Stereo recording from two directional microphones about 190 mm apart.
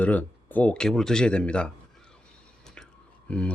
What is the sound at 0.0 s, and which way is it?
Speech, 10° left (ahead or behind).